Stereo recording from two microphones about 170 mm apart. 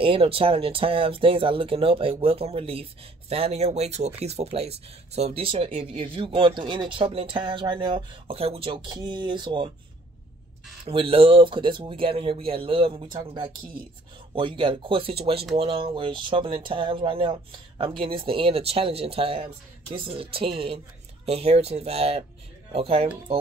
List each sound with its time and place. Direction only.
0.0 s speech: 35° right (ahead or behind)
10.9 s speech: 35° right (ahead or behind)